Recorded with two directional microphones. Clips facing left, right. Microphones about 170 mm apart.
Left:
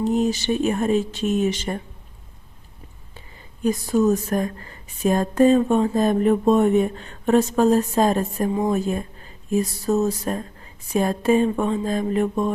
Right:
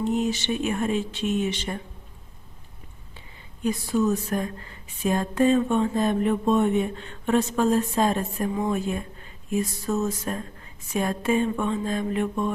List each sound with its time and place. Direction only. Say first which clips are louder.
0.0 s speech: left 4 dB; 40° left (ahead or behind)
3.2 s speech: left 5 dB; 45° left (ahead or behind)